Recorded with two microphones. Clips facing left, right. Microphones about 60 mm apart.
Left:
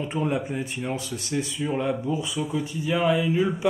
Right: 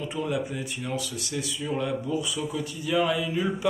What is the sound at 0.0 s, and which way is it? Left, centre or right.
Speech, left.